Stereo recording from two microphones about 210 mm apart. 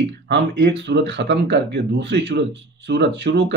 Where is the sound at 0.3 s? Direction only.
55° right (ahead or behind).